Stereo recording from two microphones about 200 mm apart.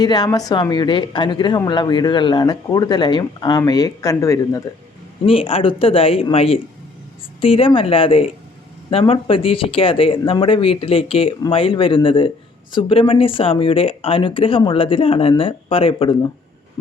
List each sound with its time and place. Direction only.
0.0 s a woman's voice: 20° left (ahead or behind)
5.2 s a woman's voice: 30° left (ahead or behind)